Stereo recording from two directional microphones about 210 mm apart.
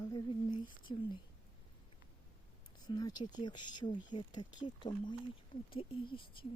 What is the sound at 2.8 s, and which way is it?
Speech, 20° left (ahead or behind).